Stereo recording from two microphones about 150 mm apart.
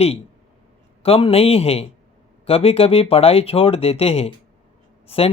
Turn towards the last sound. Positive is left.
turn(degrees=40)  # may be behind; listen again after turning